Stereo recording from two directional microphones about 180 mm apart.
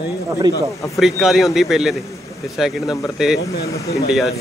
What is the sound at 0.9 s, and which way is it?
A man's voice, centre (ahead or behind).